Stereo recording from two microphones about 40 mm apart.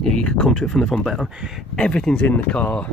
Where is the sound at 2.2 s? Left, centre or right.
Left.